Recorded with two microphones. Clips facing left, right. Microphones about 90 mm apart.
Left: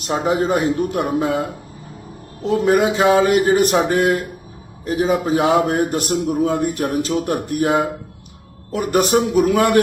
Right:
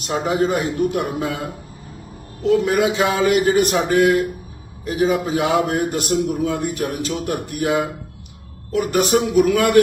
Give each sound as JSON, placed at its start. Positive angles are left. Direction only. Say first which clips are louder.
{"t": 0.0, "sound": "a man's voice", "louder": "left 1 dB", "side_deg": 30}
{"t": 2.4, "sound": "a man's voice", "louder": "left 1 dB", "side_deg": 35}